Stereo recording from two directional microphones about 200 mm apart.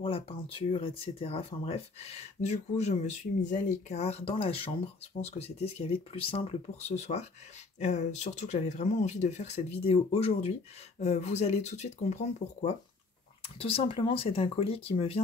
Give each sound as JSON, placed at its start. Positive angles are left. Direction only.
{"t": 0.0, "sound": "speech", "side_deg": 30}